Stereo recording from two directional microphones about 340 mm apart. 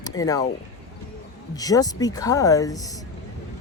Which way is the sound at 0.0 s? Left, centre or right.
Centre.